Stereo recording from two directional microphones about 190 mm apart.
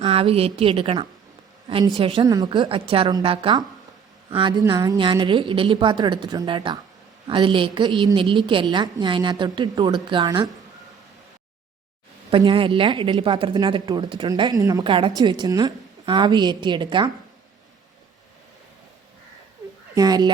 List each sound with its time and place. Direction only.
0.0 s a woman's voice: 30° right (ahead or behind)
12.3 s a woman's voice: 25° right (ahead or behind)
20.0 s a woman's voice: 20° right (ahead or behind)